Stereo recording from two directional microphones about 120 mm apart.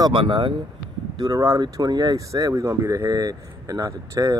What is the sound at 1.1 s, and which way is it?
Speech, 30° right (ahead or behind).